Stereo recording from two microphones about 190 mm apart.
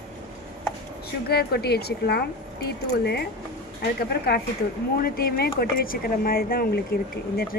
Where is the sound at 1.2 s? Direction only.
55° left (ahead or behind).